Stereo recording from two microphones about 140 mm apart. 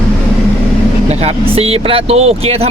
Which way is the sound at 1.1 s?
50° right (ahead or behind).